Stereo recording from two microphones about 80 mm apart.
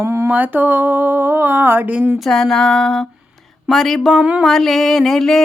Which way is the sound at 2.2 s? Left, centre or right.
Centre.